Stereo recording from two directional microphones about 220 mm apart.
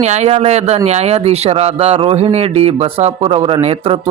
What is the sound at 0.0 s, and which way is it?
A man's voice, 30° right (ahead or behind).